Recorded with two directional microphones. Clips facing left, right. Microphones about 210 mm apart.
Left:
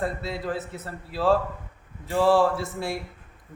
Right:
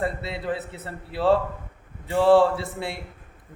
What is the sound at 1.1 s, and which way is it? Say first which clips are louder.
A man's voice: right 2 dB; 20° right (ahead or behind).